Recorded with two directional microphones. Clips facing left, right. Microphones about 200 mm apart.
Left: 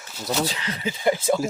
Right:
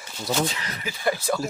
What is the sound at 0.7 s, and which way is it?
Speech, 25° left (ahead or behind).